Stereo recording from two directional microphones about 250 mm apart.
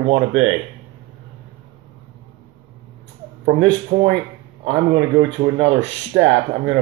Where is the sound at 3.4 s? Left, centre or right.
Right.